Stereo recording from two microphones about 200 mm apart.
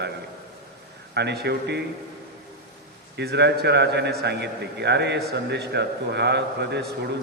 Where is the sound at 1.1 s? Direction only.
55° right (ahead or behind).